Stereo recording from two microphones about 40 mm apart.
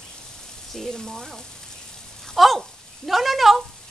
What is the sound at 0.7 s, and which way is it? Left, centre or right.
Speech, centre.